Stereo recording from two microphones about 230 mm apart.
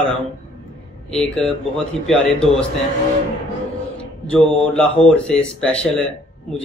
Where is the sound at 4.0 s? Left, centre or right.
Centre.